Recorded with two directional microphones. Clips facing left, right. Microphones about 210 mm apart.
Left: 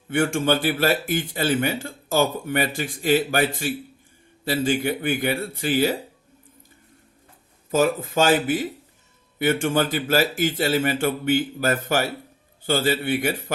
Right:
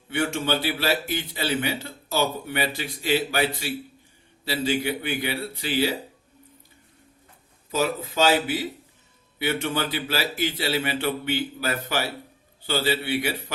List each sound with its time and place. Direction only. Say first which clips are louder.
0.1 s a man's voice: left 4 dB; 50° left (ahead or behind)
7.7 s a man's voice: left 5 dB; 50° left (ahead or behind)